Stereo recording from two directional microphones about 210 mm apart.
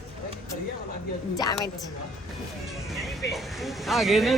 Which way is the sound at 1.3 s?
20° left (ahead or behind).